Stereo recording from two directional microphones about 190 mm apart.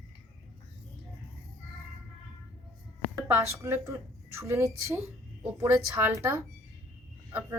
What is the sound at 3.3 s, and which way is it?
A woman's voice, 15° right (ahead or behind).